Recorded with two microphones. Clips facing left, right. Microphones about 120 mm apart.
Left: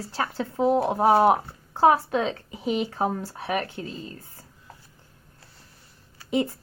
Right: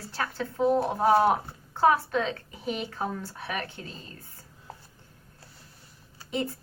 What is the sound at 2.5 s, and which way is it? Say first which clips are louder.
Speech: left 6 dB; 5° left (ahead or behind).